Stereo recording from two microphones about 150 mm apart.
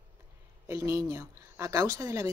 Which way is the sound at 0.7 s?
20° right (ahead or behind).